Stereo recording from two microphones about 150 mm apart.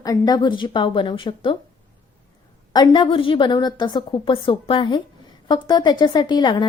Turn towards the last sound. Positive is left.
turn(degrees=30)  # may be behind; listen again after turning